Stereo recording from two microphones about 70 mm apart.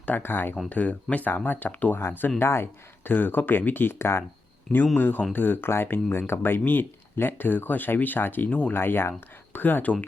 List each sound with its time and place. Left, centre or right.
0.0 s speech: left
8.7 s speech: left